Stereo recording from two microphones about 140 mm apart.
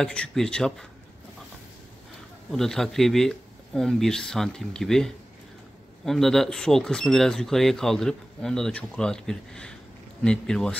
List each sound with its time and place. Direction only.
0.0 s speech: 5° left (ahead or behind)
2.5 s speech: 5° left (ahead or behind)